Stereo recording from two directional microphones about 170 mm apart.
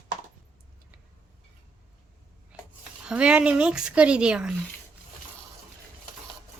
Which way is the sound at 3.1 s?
5° right (ahead or behind).